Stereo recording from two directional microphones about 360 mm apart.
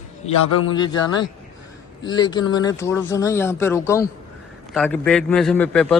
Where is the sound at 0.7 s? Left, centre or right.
Centre.